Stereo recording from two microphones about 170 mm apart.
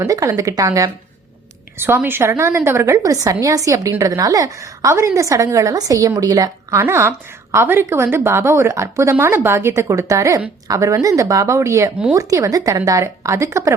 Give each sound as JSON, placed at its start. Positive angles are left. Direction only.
{"t": 0.0, "sound": "a woman's voice", "side_deg": -20}